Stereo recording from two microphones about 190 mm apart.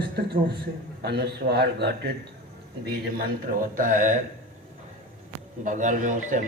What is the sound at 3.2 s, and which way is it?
Speech, 45° right (ahead or behind).